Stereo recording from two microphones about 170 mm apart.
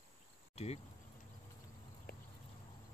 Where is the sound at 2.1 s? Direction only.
65° left (ahead or behind).